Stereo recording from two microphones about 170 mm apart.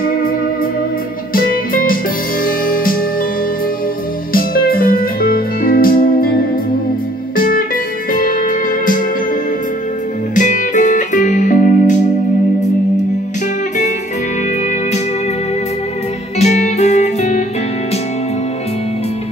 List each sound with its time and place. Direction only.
1.3 s music: 55° left (ahead or behind)
4.3 s music: 60° left (ahead or behind)
7.3 s music: 55° left (ahead or behind)
10.3 s music: 50° left (ahead or behind)
16.3 s music: 40° left (ahead or behind)